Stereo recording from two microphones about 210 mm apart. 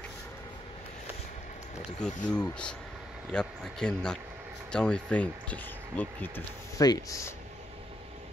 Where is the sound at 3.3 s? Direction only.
5° left (ahead or behind).